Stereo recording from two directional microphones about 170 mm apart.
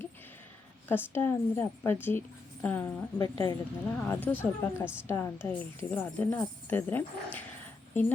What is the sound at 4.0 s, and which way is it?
Speech, 10° left (ahead or behind).